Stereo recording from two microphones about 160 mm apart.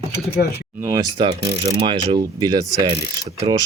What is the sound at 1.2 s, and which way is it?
Mechanisms, 30° right (ahead or behind).